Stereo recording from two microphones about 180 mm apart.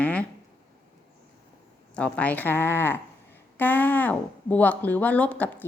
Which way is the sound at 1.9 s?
5° left (ahead or behind).